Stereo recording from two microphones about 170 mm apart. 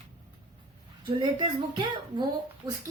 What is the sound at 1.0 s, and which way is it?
Speech, 25° right (ahead or behind).